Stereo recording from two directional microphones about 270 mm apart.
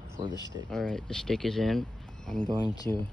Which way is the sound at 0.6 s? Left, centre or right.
Centre.